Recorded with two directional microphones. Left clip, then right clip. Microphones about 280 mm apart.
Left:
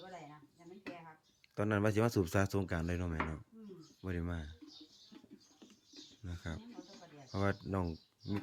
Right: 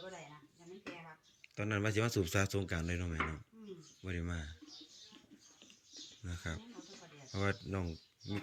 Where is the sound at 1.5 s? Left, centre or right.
Centre.